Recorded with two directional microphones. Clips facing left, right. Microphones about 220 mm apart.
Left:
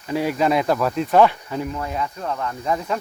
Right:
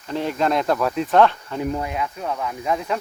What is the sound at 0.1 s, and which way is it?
Speech, 5° left (ahead or behind).